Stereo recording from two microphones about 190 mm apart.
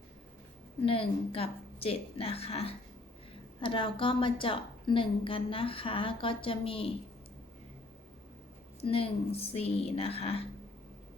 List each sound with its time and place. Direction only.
0.9 s a woman's voice: 30° left (ahead or behind)
8.8 s a woman's voice: 30° left (ahead or behind)